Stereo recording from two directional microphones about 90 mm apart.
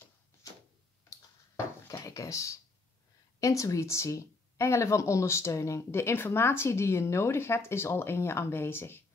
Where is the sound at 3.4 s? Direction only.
35° left (ahead or behind).